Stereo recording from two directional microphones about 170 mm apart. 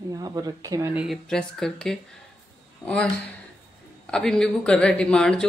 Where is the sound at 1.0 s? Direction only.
Centre (ahead or behind).